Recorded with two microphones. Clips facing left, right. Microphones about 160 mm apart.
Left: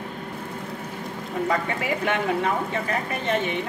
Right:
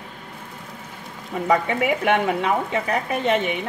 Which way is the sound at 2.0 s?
70° right (ahead or behind).